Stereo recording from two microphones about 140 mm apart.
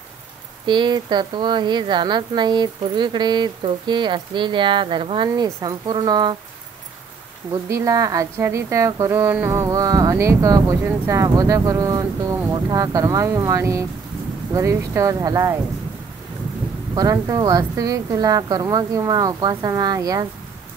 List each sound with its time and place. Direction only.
0.7 s speech: 35° right (ahead or behind)
7.7 s speech: 25° right (ahead or behind)
16.9 s speech: 25° right (ahead or behind)